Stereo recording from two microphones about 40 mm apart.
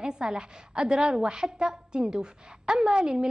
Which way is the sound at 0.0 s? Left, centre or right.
Right.